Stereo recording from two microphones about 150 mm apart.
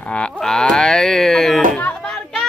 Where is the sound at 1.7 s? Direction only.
5° left (ahead or behind).